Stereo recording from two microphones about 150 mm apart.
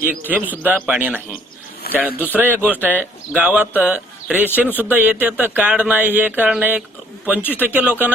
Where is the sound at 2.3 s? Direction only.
10° right (ahead or behind).